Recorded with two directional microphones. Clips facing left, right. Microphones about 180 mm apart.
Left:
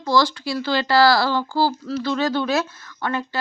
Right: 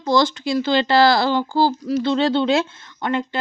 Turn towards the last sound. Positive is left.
turn(degrees=-20)  # may be behind; listen again after turning